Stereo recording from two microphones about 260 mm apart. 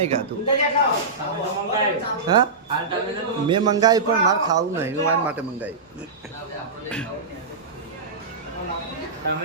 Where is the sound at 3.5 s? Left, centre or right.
Centre.